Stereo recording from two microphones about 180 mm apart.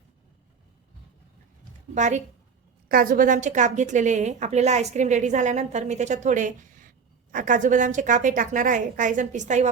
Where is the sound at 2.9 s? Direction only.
55° right (ahead or behind).